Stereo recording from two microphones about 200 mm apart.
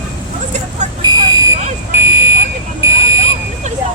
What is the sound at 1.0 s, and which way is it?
Buzzer, 20° right (ahead or behind).